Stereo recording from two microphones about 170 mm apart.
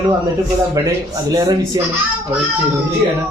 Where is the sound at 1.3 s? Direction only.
20° right (ahead or behind).